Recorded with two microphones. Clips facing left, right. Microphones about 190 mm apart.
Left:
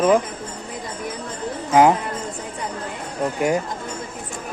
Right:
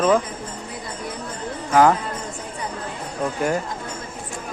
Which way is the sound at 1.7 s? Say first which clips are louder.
Left 1 dB; 15° left (ahead or behind).